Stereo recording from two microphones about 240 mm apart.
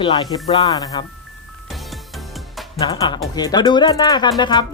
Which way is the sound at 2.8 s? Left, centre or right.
Centre.